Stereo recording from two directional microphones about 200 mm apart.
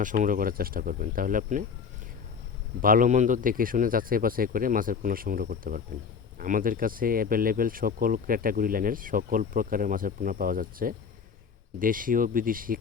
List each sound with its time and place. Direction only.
0.0 s speech: 40° right (ahead or behind)
2.8 s speech: 45° right (ahead or behind)